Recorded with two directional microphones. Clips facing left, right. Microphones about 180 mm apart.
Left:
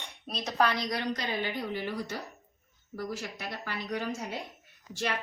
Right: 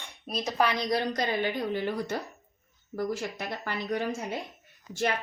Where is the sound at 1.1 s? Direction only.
50° right (ahead or behind).